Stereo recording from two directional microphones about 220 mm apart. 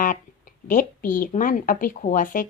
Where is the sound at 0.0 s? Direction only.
35° left (ahead or behind).